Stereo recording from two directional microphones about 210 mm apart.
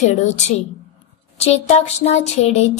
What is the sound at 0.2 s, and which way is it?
Speech, 35° left (ahead or behind).